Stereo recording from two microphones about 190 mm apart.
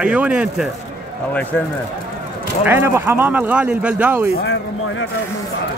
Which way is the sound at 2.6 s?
10° right (ahead or behind).